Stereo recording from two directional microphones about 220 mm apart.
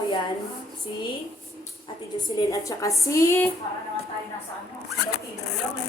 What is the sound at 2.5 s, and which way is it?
A woman's voice, 15° left (ahead or behind).